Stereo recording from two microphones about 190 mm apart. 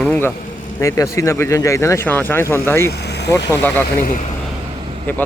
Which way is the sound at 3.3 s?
15° left (ahead or behind).